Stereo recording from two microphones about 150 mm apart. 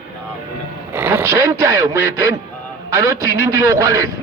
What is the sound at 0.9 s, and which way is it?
Speech, 15° right (ahead or behind).